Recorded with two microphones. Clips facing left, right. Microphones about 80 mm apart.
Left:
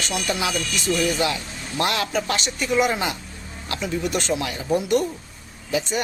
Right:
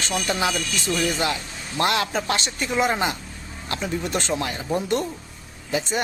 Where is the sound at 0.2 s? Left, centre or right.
Right.